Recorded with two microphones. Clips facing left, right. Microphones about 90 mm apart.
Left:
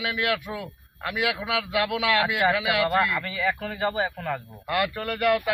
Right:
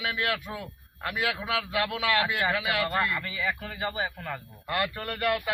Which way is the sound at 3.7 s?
35° left (ahead or behind).